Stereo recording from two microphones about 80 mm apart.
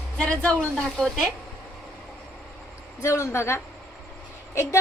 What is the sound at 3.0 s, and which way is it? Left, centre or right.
A woman's voice, left.